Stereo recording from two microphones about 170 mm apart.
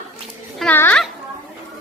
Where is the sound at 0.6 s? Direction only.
10° left (ahead or behind).